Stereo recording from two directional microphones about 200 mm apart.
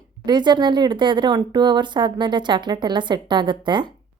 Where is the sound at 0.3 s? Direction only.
20° right (ahead or behind).